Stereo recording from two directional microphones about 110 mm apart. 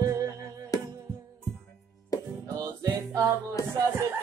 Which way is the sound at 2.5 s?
30° right (ahead or behind).